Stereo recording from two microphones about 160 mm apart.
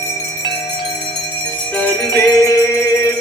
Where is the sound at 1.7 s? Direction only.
10° left (ahead or behind).